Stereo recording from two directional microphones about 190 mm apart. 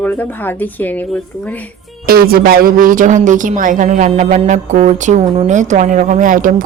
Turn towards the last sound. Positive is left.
turn(degrees=-45)  # may be behind; listen again after turning